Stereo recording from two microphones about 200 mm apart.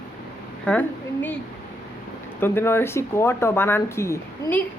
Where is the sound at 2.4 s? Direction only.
10° left (ahead or behind).